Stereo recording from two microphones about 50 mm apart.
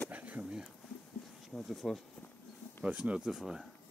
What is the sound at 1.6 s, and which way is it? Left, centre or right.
Speech, centre.